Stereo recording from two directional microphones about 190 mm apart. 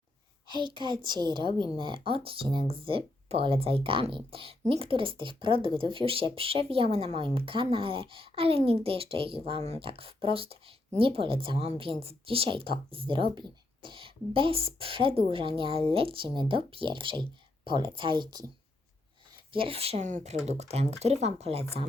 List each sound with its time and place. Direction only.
0.4 s a woman's voice: 25° right (ahead or behind)
19.5 s speech: 30° right (ahead or behind)